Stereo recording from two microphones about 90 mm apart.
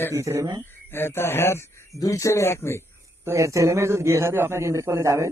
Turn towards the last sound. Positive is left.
turn(degrees=-35)  # may be behind; listen again after turning